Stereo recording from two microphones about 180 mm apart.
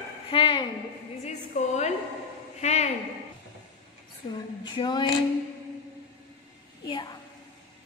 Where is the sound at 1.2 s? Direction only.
40° left (ahead or behind).